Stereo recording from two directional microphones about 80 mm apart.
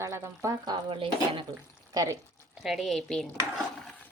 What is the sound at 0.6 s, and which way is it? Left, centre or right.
Stir, right.